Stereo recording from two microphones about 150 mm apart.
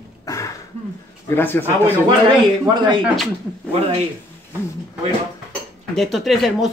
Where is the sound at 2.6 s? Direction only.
30° right (ahead or behind).